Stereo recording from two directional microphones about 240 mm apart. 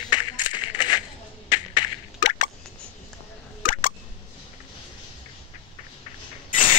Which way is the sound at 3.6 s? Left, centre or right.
Left.